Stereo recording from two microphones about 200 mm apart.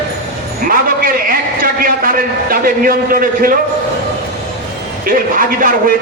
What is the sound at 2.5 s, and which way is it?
A man's voice, 45° right (ahead or behind).